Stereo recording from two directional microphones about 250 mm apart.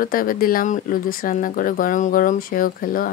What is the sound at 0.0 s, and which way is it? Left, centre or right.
Speech, left.